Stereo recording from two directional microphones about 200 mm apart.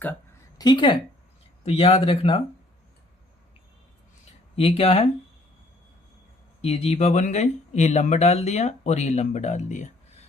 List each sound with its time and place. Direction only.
0.6 s speech: 20° left (ahead or behind)
4.5 s speech: 30° left (ahead or behind)
6.6 s speech: 30° left (ahead or behind)